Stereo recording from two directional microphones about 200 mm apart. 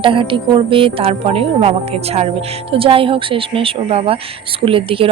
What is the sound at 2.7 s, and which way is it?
Speech, 25° right (ahead or behind).